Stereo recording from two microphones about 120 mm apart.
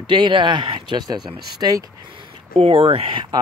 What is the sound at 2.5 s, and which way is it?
Speech, 50° right (ahead or behind).